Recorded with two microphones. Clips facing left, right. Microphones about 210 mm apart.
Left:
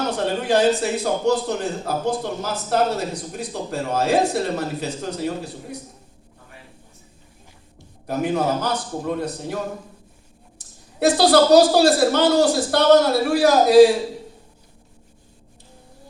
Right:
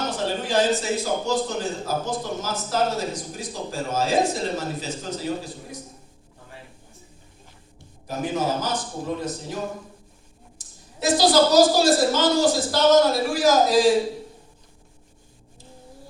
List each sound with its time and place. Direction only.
0.4 s a man's voice: 65° left (ahead or behind)
8.0 s a man's voice: 60° left (ahead or behind)
11.0 s a man's voice: 65° left (ahead or behind)